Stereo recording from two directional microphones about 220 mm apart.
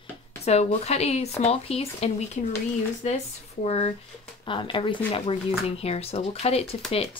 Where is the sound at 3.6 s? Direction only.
30° left (ahead or behind).